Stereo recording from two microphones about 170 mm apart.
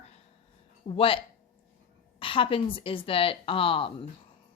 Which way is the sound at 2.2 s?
30° left (ahead or behind).